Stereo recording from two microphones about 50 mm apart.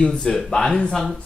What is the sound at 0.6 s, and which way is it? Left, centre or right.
Speech, centre.